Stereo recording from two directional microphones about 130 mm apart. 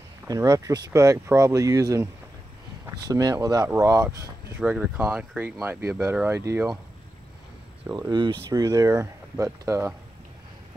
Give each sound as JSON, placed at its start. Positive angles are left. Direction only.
{"t": 0.3, "sound": "speech", "side_deg": -25}
{"t": 4.6, "sound": "speech", "side_deg": -10}
{"t": 8.1, "sound": "speech", "side_deg": -35}